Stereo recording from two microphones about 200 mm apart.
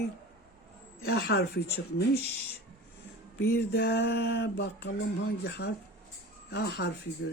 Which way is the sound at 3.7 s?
55° left (ahead or behind).